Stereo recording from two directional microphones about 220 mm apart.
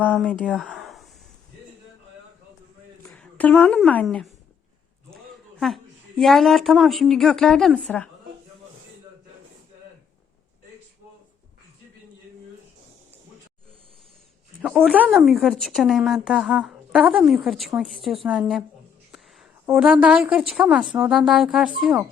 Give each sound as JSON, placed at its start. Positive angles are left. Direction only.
{"t": 0.0, "sound": "speech", "side_deg": -5}
{"t": 0.3, "sound": "speech", "side_deg": 5}
{"t": 3.0, "sound": "a woman's voice", "side_deg": 5}
{"t": 14.6, "sound": "a woman's voice", "side_deg": -5}